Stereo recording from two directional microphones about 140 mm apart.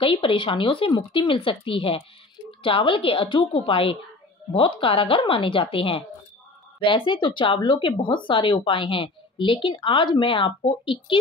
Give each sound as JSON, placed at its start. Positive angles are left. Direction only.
{"t": 0.0, "sound": "speech", "side_deg": 40}